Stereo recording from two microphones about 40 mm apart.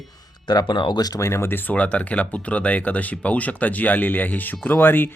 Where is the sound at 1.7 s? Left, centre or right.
Left.